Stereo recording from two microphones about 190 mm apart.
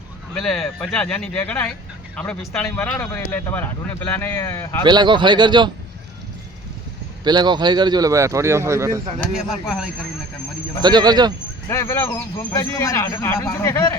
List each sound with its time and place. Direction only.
0.3 s speech: centre (ahead or behind)
4.8 s speech: 25° right (ahead or behind)
7.3 s a man's voice: 25° right (ahead or behind)
9.3 s speech: centre (ahead or behind)
10.8 s speech: 20° right (ahead or behind)
11.7 s speech: 15° left (ahead or behind)